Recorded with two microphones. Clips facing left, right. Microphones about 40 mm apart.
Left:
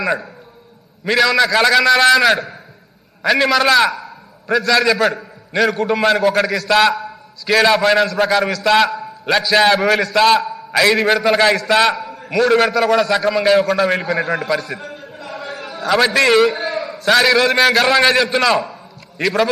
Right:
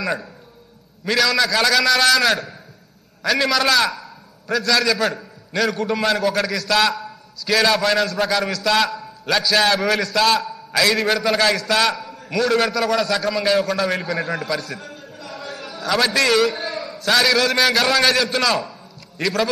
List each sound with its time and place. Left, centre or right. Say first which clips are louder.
0.0 s a man's voice: left 5 dB; centre